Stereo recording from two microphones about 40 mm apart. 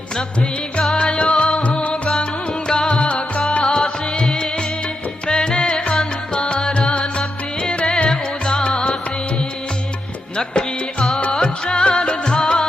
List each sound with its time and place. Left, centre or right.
0.9 s music: left
10.3 s music: left